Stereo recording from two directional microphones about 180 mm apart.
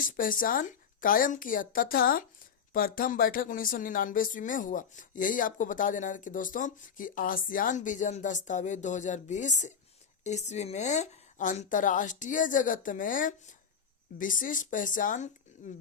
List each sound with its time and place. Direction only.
0.0 s speech: 50° left (ahead or behind)